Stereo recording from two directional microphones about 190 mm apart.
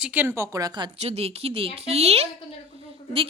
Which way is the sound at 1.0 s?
35° right (ahead or behind).